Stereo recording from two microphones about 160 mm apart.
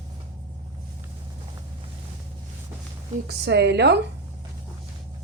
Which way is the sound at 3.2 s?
90° right.